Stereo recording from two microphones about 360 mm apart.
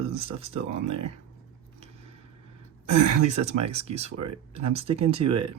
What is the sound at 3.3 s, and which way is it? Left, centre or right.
Speech, centre.